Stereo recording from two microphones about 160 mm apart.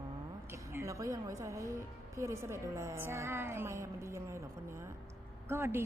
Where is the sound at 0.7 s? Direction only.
20° right (ahead or behind).